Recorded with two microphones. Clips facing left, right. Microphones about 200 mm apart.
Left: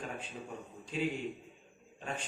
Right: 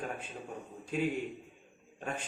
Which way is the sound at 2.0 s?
50° right (ahead or behind).